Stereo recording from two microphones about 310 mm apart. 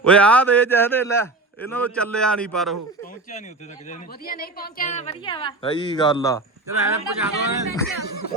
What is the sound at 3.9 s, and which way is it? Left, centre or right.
A woman's voice, left.